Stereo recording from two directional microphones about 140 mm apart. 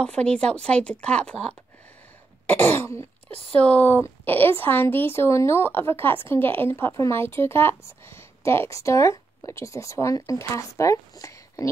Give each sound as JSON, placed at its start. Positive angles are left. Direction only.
{"t": 0.0, "sound": "speech", "side_deg": 5}